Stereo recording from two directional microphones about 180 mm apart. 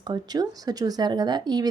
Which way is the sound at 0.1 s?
20° right (ahead or behind).